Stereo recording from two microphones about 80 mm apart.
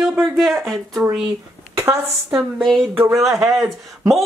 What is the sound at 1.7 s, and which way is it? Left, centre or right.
A woman's voice, right.